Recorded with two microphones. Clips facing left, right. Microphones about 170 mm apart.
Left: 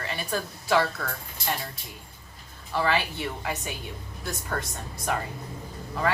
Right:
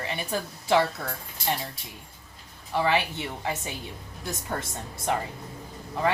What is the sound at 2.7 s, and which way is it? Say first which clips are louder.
A woman's voice: right 1 dB; 20° right (ahead or behind).